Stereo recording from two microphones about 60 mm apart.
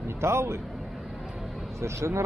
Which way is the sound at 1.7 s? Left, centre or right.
Right.